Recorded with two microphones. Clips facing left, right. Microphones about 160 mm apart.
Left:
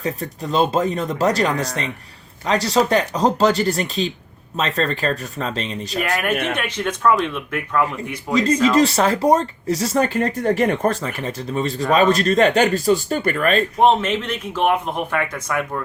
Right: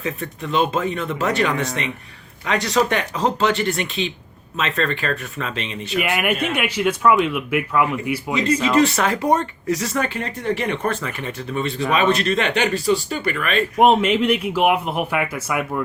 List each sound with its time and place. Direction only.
0.0 s speech: 35° left (ahead or behind)
6.0 s speech: 10° right (ahead or behind)
8.7 s speech: 35° left (ahead or behind)
13.7 s speech: 10° right (ahead or behind)